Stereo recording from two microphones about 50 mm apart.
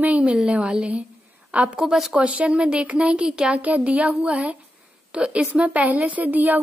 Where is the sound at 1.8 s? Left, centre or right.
Centre.